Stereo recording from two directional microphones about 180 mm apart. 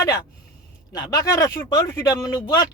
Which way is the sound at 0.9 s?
20° left (ahead or behind).